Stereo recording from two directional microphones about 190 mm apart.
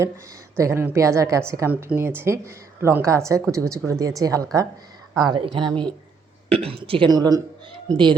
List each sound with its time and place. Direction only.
0.5 s a woman's voice: 15° right (ahead or behind)
5.6 s speech: 5° left (ahead or behind)
6.5 s speech: 30° right (ahead or behind)